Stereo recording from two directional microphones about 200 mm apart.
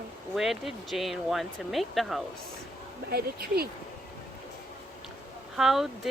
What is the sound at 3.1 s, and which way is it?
Speech, 50° right (ahead or behind).